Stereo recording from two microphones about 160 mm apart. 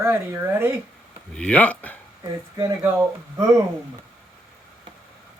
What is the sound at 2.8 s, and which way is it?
Speech, 15° right (ahead or behind).